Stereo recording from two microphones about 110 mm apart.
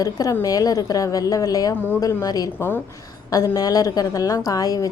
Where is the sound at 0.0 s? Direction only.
30° left (ahead or behind).